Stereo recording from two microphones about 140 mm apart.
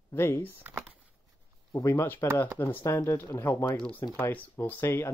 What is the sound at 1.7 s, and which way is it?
Speech, 20° left (ahead or behind).